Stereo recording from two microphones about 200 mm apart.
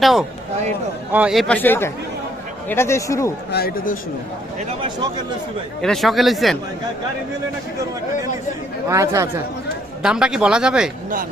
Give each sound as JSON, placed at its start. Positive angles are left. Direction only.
{"t": 0.0, "sound": "a man's voice", "side_deg": 0}
{"t": 3.5, "sound": "a man's voice", "side_deg": 50}
{"t": 5.8, "sound": "a man's voice", "side_deg": 0}
{"t": 8.9, "sound": "speech", "side_deg": -15}
{"t": 10.0, "sound": "a man's voice", "side_deg": -5}